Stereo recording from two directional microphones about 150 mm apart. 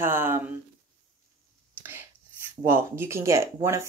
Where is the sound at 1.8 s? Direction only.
15° right (ahead or behind).